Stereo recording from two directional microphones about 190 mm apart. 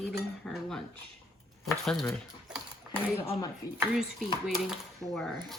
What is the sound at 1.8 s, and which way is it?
Speech, centre (ahead or behind).